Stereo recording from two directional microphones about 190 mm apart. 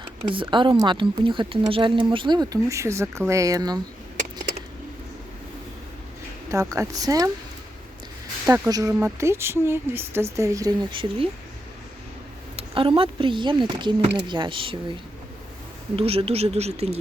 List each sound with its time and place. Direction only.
0.3 s a woman's voice: 25° right (ahead or behind)
6.5 s a woman's voice: 15° right (ahead or behind)
8.4 s a woman's voice: 15° right (ahead or behind)
12.5 s a woman's voice: 25° right (ahead or behind)
16.0 s speech: 30° right (ahead or behind)